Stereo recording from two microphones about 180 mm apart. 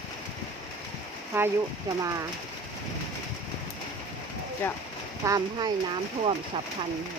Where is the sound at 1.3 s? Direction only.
15° right (ahead or behind).